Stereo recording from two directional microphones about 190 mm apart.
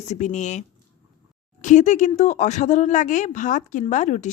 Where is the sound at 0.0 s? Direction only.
40° left (ahead or behind).